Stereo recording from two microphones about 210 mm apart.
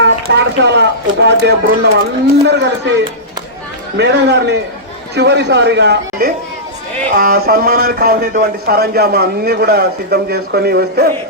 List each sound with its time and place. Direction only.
0.0 s a sound: 55° right (ahead or behind)
1.2 s speech: 55° right (ahead or behind)
3.9 s speech: 55° right (ahead or behind)